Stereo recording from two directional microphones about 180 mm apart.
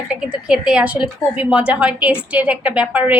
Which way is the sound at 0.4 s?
5° right (ahead or behind).